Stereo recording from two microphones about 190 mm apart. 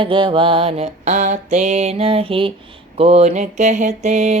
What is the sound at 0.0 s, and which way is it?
Mantra, 25° right (ahead or behind).